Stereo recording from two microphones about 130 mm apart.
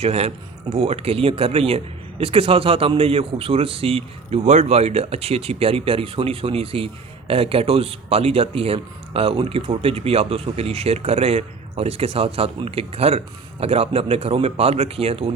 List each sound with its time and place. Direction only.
0.0 s speech: 50° right (ahead or behind)